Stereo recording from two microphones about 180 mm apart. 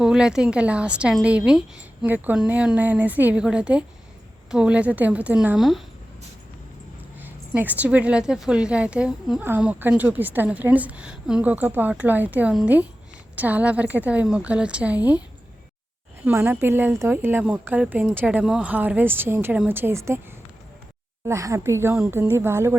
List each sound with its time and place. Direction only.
0.0 s a woman's voice: 5° right (ahead or behind)
7.2 s a woman's voice: 10° right (ahead or behind)
16.2 s a woman's voice: 10° right (ahead or behind)
21.2 s a woman's voice: 15° right (ahead or behind)